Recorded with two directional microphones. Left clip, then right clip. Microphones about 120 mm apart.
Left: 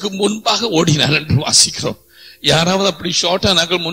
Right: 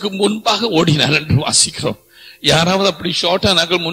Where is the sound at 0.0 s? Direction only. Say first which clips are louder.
Right 1 dB; 55° left (ahead or behind).